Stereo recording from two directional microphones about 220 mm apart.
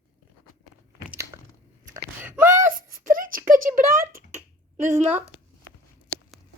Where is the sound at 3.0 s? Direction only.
40° right (ahead or behind).